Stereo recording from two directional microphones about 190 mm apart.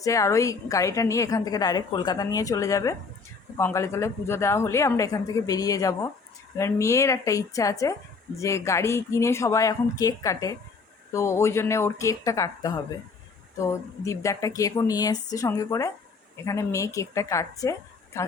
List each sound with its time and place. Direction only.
0.0 s a woman's voice: 15° left (ahead or behind)